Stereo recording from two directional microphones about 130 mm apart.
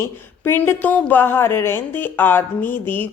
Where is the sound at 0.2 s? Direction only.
15° left (ahead or behind).